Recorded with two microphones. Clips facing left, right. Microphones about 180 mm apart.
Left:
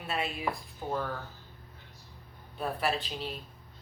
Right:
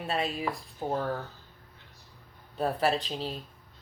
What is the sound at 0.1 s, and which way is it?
Speech, 35° right (ahead or behind).